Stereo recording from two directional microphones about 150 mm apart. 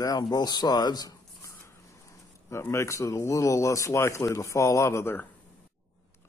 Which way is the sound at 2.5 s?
20° left (ahead or behind).